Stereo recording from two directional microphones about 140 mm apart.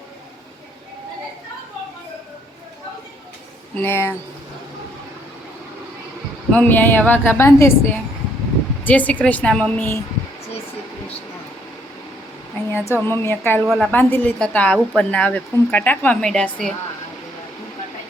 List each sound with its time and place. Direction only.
3.8 s a woman's voice: 15° left (ahead or behind)
6.5 s a woman's voice: 10° left (ahead or behind)
12.9 s a woman's voice: 15° left (ahead or behind)
13.7 s a woman's voice: centre (ahead or behind)
13.9 s a woman's voice: 10° left (ahead or behind)